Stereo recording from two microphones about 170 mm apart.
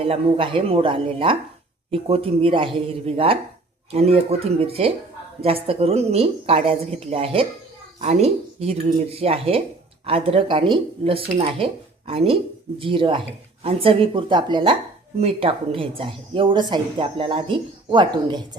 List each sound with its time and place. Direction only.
0.0 s a woman's voice: 30° right (ahead or behind)